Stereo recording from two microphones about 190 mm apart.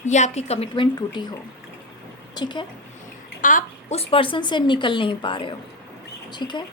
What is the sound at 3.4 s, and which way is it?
A woman's voice, 40° left (ahead or behind).